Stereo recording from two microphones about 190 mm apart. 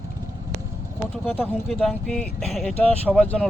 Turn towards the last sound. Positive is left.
turn(degrees=5)  # may be behind; listen again after turning